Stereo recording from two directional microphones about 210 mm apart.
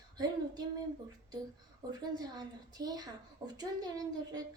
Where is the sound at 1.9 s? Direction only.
20° right (ahead or behind).